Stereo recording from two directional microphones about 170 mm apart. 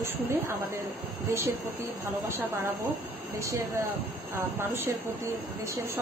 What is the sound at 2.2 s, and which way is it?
A woman's voice, 15° right (ahead or behind).